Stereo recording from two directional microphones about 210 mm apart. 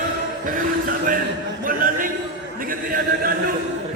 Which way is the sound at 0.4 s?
40° right (ahead or behind).